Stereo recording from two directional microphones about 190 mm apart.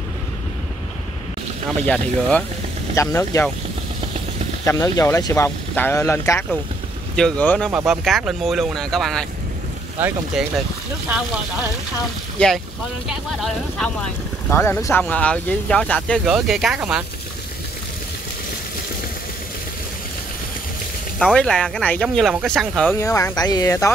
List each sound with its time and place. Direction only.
1.9 s speech: 5° left (ahead or behind)
4.6 s speech: 20° left (ahead or behind); by 9.2 s centre (ahead or behind)
9.9 s speech: 10° right (ahead or behind)
12.4 s speech: 5° left (ahead or behind)
21.2 s speech: 5° left (ahead or behind)
22.9 s speech: 15° left (ahead or behind)